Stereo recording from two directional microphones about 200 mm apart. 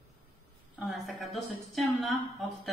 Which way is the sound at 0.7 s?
5° right (ahead or behind).